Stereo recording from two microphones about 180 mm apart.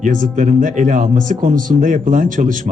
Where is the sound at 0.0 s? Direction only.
45° right (ahead or behind).